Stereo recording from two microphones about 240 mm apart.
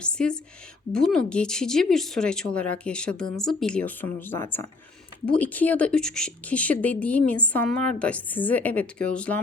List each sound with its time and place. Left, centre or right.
0.0 s speech: centre